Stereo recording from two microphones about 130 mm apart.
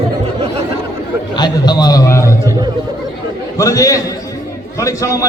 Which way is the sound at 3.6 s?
25° left (ahead or behind).